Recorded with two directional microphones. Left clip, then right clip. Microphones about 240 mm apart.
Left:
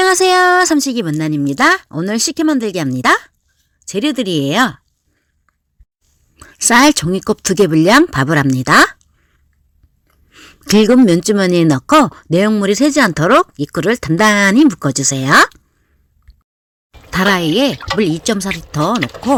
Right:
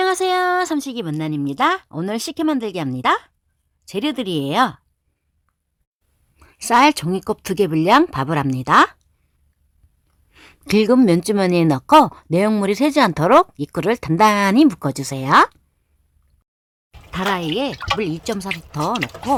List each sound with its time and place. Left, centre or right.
0.0 s speech: centre
6.3 s speech: centre
10.1 s speech: centre
17.1 s speech: centre